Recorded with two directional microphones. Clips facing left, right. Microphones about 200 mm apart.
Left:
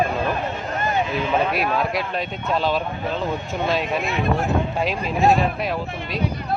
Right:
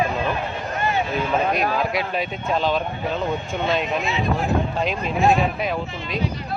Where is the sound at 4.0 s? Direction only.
55° left (ahead or behind).